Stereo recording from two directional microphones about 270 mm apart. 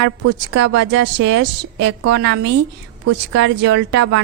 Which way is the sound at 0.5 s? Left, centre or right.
Right.